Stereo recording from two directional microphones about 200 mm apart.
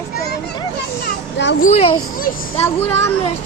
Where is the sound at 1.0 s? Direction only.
60° left (ahead or behind).